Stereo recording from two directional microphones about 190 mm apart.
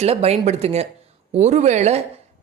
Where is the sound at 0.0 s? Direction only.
35° right (ahead or behind).